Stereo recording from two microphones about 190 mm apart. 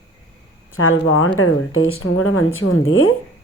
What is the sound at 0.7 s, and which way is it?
A woman's voice, 90° left.